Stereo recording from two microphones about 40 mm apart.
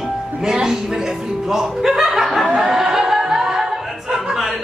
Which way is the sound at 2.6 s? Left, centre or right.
Centre.